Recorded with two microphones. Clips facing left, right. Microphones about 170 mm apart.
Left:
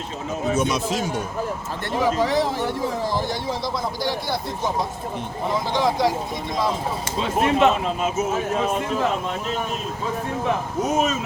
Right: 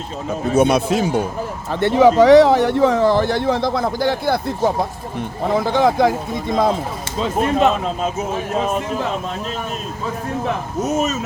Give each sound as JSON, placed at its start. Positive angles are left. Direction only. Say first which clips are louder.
{"t": 0.5, "sound": "speech", "louder": "right 9 dB", "side_deg": -60}
{"t": 7.4, "sound": "speech", "louder": "right 1 dB", "side_deg": -40}